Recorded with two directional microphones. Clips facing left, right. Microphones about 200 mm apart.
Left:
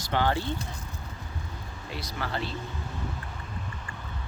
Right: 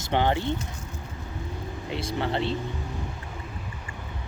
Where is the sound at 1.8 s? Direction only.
25° right (ahead or behind).